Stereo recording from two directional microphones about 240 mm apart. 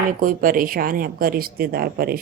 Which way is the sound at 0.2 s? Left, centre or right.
Right.